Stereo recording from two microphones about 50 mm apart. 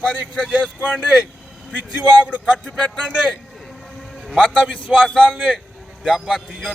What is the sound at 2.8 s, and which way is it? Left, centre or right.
Speech, left.